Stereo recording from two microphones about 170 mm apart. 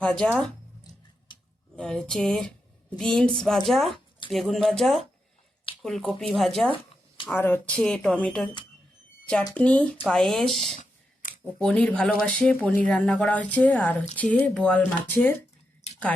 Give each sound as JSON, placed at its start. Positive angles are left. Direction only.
{"t": 0.0, "sound": "speech", "side_deg": 5}
{"t": 1.7, "sound": "speech", "side_deg": 5}
{"t": 9.6, "sound": "speech", "side_deg": 10}
{"t": 10.8, "sound": "clicking", "side_deg": 50}
{"t": 11.6, "sound": "speech", "side_deg": 5}
{"t": 15.8, "sound": "a sound", "side_deg": 40}